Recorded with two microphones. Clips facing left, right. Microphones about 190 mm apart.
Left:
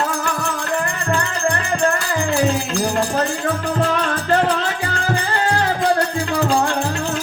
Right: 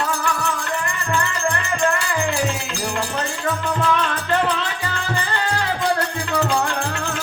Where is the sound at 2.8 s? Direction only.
35° left (ahead or behind).